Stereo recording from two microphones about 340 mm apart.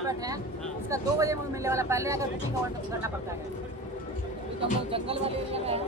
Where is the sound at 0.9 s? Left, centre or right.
Centre.